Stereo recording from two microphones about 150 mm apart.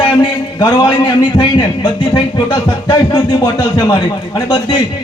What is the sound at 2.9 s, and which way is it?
A man's voice, 30° left (ahead or behind).